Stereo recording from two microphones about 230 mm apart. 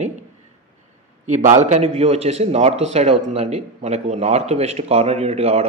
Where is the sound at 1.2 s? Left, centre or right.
Right.